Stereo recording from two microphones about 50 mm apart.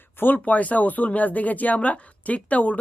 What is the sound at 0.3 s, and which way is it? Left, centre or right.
Speech, left.